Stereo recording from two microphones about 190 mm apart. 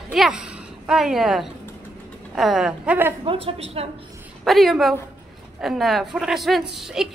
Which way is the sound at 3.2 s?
30° right (ahead or behind).